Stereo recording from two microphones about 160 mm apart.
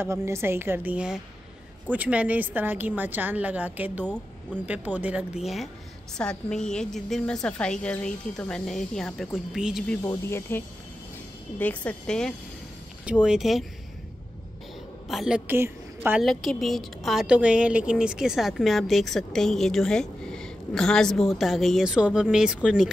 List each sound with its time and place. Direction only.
0.0 s a woman's voice: 15° right (ahead or behind); by 9.9 s centre (ahead or behind)
10.0 s speech: 15° left (ahead or behind)
11.6 s speech: 10° left (ahead or behind)
15.0 s a woman's voice: centre (ahead or behind)
16.3 s speech: centre (ahead or behind)